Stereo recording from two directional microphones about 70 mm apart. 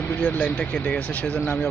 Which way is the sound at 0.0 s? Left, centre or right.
Left.